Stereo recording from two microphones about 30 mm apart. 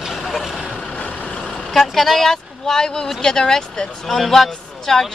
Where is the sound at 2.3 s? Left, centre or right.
Centre.